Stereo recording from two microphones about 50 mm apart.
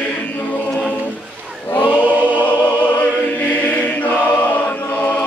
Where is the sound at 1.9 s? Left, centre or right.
Right.